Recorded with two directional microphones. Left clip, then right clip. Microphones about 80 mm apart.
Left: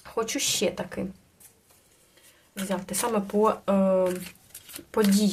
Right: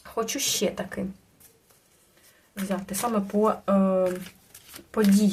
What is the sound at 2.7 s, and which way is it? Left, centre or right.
Speech, left.